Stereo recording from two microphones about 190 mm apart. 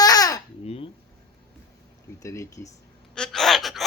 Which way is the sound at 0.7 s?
30° left (ahead or behind).